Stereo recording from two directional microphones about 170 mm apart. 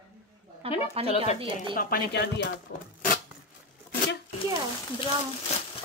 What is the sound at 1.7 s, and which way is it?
Speech, 65° left (ahead or behind).